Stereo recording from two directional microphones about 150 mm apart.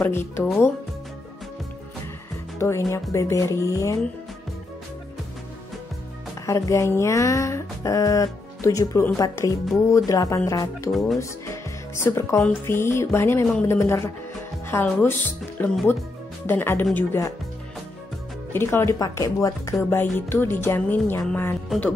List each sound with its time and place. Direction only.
0.0 s speech: 15° left (ahead or behind)
2.6 s speech: 20° left (ahead or behind)
6.4 s speech: 20° left (ahead or behind)
10.9 s speech: centre (ahead or behind)
11.1 s music: 20° left (ahead or behind)
12.4 s speech: 10° left (ahead or behind)
18.5 s speech: 15° left (ahead or behind)